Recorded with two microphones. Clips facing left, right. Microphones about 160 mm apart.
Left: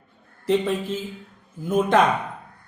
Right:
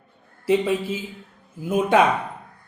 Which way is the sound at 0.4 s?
5° right (ahead or behind).